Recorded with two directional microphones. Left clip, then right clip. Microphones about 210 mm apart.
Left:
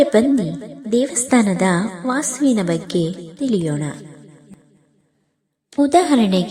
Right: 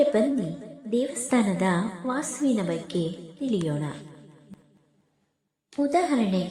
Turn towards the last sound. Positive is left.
turn(degrees=35)  # may be behind; listen again after turning